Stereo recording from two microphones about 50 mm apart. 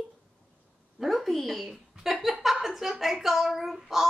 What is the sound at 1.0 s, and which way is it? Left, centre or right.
A woman's voice, centre.